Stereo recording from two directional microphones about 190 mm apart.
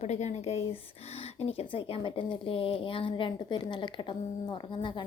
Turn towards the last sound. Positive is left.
turn(degrees=25)  # may be behind; listen again after turning